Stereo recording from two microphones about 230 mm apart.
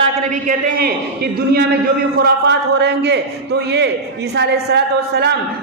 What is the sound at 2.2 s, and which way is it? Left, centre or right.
A man's voice, right.